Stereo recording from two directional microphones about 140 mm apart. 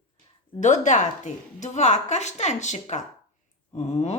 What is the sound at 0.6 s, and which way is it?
Speech, 60° left (ahead or behind).